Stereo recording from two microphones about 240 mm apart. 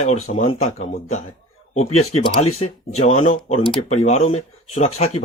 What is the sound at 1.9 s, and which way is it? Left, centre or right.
Speech, left.